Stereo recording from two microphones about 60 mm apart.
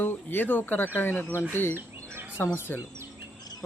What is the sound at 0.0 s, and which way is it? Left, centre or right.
Speech, left.